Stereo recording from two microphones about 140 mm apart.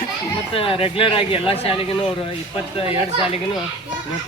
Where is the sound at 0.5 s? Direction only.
40° left (ahead or behind).